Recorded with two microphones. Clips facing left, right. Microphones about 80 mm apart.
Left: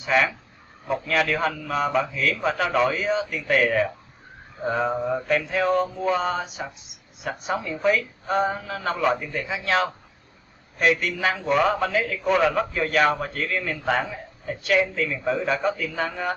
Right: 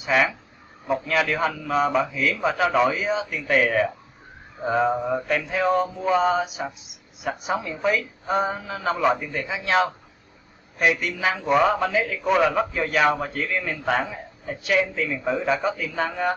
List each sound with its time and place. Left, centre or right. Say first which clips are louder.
0.0 s a man's voice: even; centre